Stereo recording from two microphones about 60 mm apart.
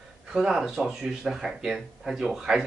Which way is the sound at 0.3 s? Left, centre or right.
Centre.